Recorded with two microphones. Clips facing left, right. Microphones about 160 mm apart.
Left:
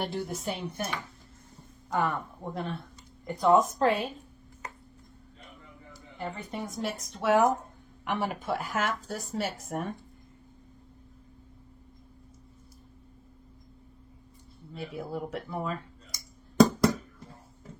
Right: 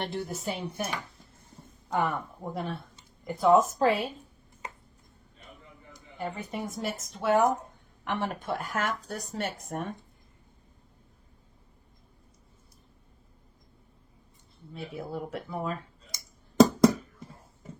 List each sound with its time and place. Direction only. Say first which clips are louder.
0.0 s a woman's voice: left 1 dB; centre (ahead or behind)
6.1 s a woman's voice: right 1 dB; 5° right (ahead or behind)
14.7 s a woman's voice: left 1 dB; centre (ahead or behind)
16.1 s a sound: right 1 dB; 20° right (ahead or behind)